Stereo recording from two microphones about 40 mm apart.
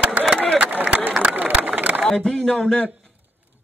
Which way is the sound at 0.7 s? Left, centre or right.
Right.